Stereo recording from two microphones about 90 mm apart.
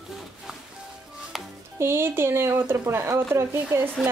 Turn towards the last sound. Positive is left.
turn(degrees=-25)  # may be behind; listen again after turning